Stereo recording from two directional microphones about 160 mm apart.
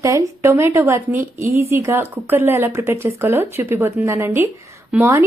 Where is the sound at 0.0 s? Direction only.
20° right (ahead or behind).